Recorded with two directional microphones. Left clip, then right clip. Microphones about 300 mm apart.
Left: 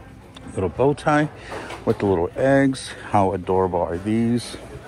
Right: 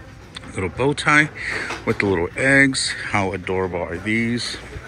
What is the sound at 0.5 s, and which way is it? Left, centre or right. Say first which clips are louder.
Speech: left 1 dB; centre.